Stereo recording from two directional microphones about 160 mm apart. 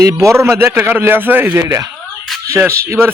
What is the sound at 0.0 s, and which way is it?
A man's voice, 20° right (ahead or behind).